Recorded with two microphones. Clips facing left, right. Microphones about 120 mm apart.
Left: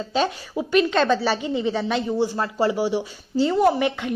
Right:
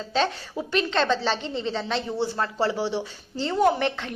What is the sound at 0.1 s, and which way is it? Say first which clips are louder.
A woman's voice: left 1 dB; 10° left (ahead or behind).